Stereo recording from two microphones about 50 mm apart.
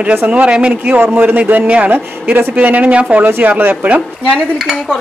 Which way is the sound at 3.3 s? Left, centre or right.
Right.